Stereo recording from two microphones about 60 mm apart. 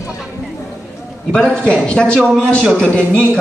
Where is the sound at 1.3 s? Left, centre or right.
Centre.